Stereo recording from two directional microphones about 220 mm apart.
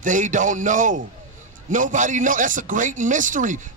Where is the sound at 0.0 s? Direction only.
35° right (ahead or behind).